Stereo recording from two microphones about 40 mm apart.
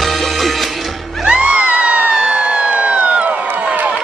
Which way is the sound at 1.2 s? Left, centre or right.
Right.